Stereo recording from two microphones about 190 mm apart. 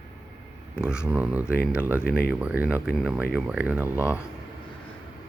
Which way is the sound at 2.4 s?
5° right (ahead or behind).